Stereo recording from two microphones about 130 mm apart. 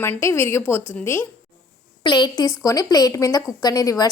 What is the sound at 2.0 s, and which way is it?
A woman's voice, 30° left (ahead or behind).